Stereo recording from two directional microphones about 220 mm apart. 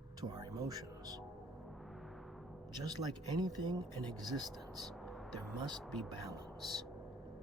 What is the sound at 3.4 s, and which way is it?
Speech, 20° right (ahead or behind).